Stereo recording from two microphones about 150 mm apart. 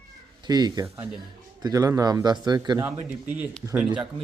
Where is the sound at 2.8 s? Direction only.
10° right (ahead or behind).